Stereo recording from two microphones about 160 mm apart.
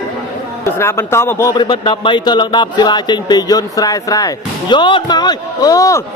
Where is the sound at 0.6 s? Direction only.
15° left (ahead or behind).